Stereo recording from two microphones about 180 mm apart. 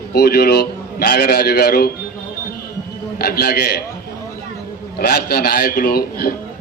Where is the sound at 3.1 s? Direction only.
60° left (ahead or behind).